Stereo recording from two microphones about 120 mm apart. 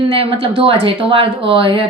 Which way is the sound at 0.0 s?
50° right (ahead or behind).